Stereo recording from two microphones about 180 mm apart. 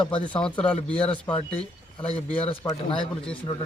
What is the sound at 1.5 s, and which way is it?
Speech, 30° left (ahead or behind).